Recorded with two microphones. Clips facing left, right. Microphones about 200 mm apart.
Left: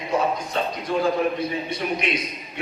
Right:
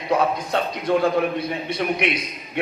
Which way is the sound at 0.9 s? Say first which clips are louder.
Right 5 dB; 65° right (ahead or behind).